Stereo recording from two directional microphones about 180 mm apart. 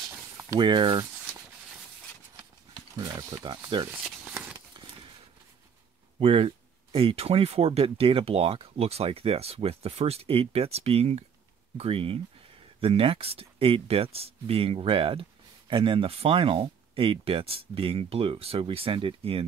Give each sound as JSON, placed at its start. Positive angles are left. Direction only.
{"t": 0.4, "sound": "speech", "side_deg": -20}
{"t": 2.7, "sound": "speech", "side_deg": -20}
{"t": 3.9, "sound": "a sound", "side_deg": -5}
{"t": 6.1, "sound": "speech", "side_deg": -30}